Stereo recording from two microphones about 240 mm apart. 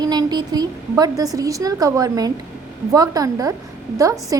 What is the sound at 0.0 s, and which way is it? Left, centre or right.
A woman's voice, centre.